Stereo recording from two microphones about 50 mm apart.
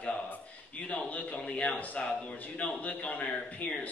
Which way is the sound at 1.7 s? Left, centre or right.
Left.